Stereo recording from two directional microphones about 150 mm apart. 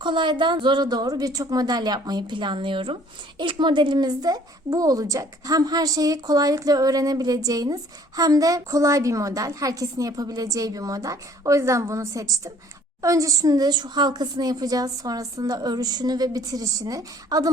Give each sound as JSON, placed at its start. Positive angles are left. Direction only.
{"t": 0.0, "sound": "speech", "side_deg": -30}